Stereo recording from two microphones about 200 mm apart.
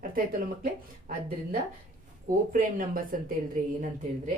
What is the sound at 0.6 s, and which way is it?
Speech, 40° right (ahead or behind).